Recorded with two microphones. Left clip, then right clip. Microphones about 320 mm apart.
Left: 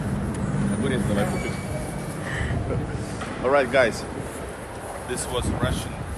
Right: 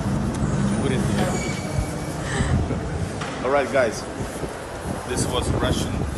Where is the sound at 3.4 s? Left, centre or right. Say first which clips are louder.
Left 1 dB; left.